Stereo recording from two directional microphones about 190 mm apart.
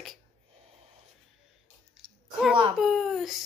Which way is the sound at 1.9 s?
Centre (ahead or behind).